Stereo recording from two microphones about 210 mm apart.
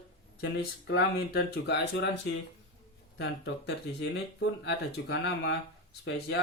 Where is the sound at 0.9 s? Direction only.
55° left (ahead or behind).